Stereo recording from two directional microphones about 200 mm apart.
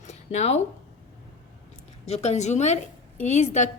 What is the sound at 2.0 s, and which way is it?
A woman's voice, 30° left (ahead or behind).